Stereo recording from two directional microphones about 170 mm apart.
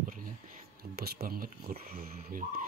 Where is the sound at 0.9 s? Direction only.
65° right (ahead or behind).